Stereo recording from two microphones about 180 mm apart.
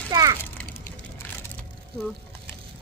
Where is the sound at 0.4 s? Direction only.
10° left (ahead or behind).